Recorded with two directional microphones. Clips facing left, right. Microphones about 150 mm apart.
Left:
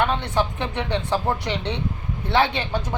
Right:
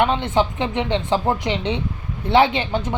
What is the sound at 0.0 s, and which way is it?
Speech, 20° right (ahead or behind).